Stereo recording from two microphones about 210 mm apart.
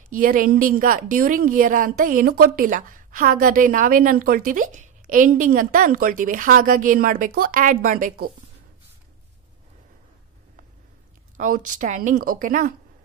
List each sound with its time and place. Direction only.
0.1 s a woman's voice: 40° right (ahead or behind)
11.3 s a woman's voice: 40° right (ahead or behind)